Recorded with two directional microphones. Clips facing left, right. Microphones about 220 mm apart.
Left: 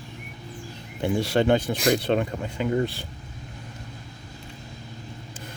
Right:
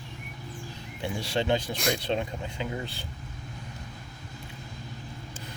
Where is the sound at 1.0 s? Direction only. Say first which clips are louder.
Left 8 dB; 55° left (ahead or behind).